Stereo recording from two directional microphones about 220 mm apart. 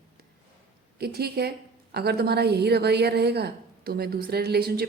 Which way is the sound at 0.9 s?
45° right (ahead or behind).